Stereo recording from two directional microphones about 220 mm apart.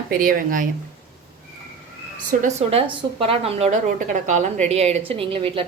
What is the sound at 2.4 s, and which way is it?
A woman's voice, 30° right (ahead or behind).